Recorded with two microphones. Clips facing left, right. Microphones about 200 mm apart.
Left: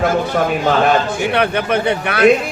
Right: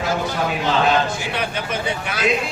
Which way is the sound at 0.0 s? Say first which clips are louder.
Left 7 dB; 55° left (ahead or behind).